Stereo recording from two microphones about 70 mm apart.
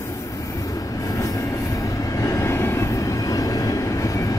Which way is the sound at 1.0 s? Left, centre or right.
Left.